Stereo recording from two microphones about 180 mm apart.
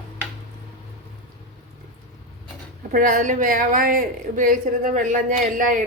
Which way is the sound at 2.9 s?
50° right (ahead or behind).